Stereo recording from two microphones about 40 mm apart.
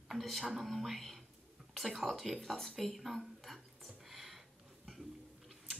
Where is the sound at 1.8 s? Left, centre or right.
Centre.